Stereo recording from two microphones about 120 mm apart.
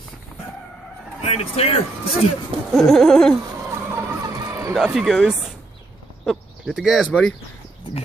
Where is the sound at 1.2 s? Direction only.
60° left (ahead or behind).